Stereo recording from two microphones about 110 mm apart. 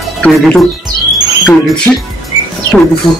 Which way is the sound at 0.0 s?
5° left (ahead or behind).